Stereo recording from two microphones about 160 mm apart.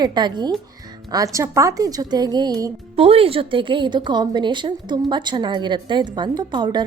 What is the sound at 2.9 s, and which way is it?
A woman's voice, 35° right (ahead or behind).